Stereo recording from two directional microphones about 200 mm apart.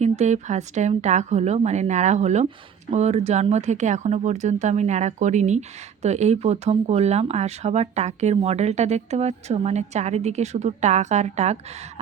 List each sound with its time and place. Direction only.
0.0 s speech: 35° right (ahead or behind)